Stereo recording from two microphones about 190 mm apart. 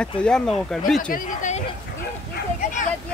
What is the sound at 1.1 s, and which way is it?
Speech, 40° left (ahead or behind).